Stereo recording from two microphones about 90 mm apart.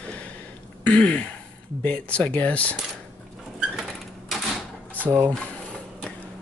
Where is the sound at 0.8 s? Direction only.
15° left (ahead or behind).